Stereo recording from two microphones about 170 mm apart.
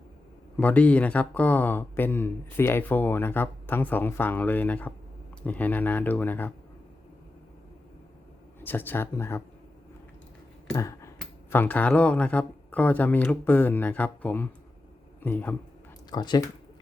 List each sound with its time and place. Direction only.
0.5 s speech: 10° left (ahead or behind)
8.6 s speech: 10° left (ahead or behind)
10.8 s a sound: 20° left (ahead or behind)
11.2 s speech: 10° left (ahead or behind)
16.0 s speech: 25° left (ahead or behind)